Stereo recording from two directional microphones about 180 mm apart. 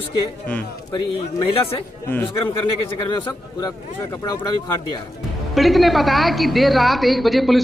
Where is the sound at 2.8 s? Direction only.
25° left (ahead or behind).